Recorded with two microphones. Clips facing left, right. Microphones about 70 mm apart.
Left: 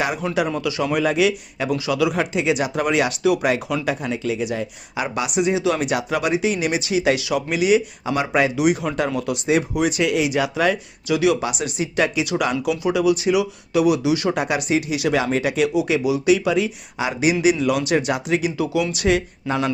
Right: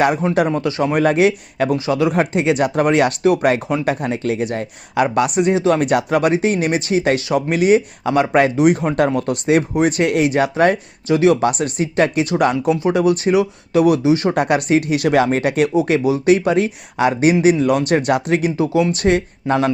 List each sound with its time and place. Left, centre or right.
0.3 s speech: right
9.1 s speech: right
11.3 s speech: right
14.3 s speech: right
18.5 s speech: right